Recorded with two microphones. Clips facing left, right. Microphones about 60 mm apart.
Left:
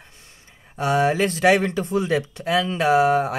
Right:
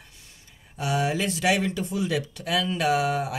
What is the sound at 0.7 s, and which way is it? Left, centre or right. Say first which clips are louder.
Speech: left 6 dB; left.